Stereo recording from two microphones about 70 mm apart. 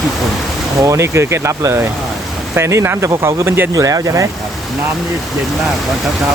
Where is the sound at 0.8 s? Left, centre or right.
Right.